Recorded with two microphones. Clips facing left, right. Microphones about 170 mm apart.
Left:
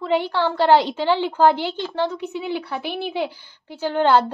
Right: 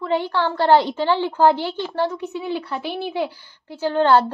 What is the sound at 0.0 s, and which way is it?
A woman's voice, 15° left (ahead or behind).